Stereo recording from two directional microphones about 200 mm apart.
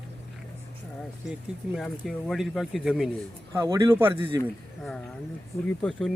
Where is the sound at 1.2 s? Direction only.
Centre (ahead or behind).